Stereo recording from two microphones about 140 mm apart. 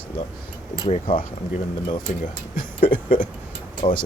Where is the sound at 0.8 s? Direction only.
40° left (ahead or behind).